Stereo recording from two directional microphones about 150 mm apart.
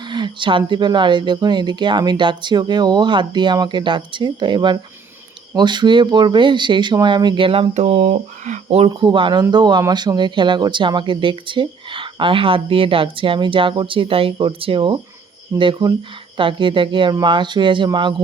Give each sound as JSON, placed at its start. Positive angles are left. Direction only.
{"t": 0.1, "sound": "speech", "side_deg": -30}